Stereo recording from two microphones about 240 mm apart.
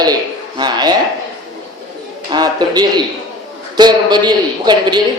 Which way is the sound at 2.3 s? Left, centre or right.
Centre.